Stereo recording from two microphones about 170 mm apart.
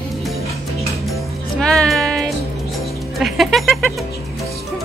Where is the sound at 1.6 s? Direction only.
5° left (ahead or behind).